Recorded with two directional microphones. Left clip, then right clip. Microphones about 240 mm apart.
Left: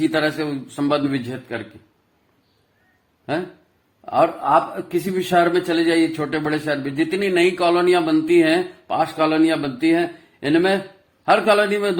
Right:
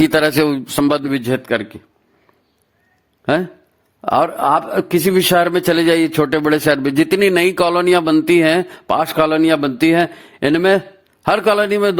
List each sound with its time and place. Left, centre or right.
0.0 s a man's voice: right
4.0 s a man's voice: right